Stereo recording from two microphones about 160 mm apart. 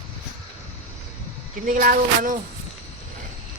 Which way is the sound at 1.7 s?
60° right (ahead or behind).